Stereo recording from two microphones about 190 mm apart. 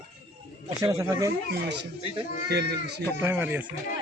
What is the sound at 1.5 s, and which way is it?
Speech, 65° right (ahead or behind).